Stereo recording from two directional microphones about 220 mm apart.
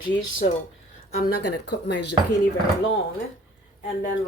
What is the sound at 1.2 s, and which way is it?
Speech, 50° left (ahead or behind).